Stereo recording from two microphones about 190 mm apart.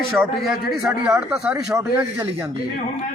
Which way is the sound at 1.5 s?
15° right (ahead or behind).